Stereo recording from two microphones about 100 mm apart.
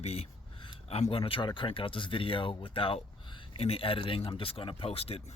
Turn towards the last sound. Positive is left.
turn(degrees=80)